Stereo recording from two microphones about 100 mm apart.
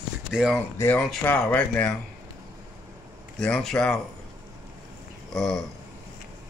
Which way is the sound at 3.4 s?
5° left (ahead or behind).